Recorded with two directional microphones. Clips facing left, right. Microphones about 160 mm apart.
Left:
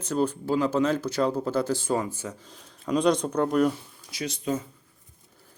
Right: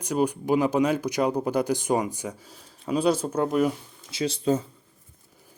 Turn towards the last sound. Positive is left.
turn(degrees=-30)  # may be behind; listen again after turning